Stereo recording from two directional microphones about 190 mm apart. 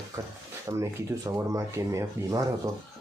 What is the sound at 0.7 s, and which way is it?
Speech, 15° right (ahead or behind).